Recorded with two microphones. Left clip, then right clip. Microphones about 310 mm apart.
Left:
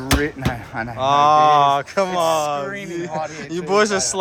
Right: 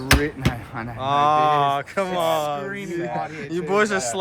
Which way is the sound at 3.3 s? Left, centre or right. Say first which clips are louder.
Left 4 dB; centre.